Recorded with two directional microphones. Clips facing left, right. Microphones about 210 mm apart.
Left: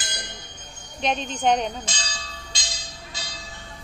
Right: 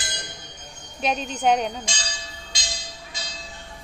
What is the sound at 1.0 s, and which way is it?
Speech, 5° right (ahead or behind).